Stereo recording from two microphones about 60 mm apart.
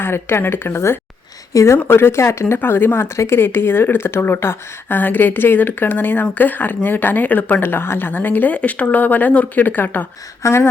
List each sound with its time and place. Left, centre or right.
0.0 s a woman's voice: left
1.5 s speech: left
1.8 s speech: left
2.6 s a woman's voice: left
10.4 s a sound: left